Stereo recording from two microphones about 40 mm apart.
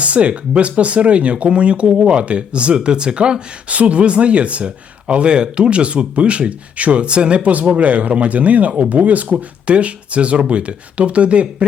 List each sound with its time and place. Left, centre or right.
0.0 s speech: right
3.7 s speech: right